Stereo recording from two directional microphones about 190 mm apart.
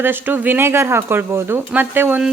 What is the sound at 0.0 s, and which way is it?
Speech, 10° right (ahead or behind).